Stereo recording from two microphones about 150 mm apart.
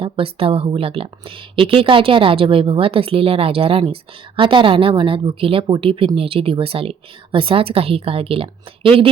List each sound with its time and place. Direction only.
0.0 s speech: 40° right (ahead or behind)